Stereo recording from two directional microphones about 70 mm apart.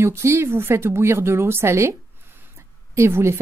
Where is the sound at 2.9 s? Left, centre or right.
Right.